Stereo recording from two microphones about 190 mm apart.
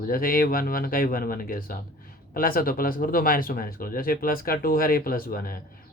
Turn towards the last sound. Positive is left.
turn(degrees=50)  # may be behind; listen again after turning